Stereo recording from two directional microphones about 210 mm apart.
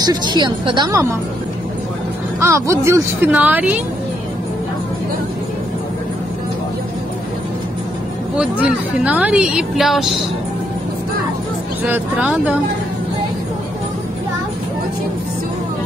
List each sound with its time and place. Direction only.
0.0 s a woman's voice: 20° right (ahead or behind)
2.4 s speech: 15° right (ahead or behind)
8.4 s a woman's voice: 5° right (ahead or behind)
11.8 s speech: 5° right (ahead or behind)